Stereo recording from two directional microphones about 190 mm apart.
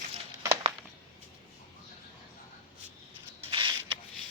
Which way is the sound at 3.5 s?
25° right (ahead or behind).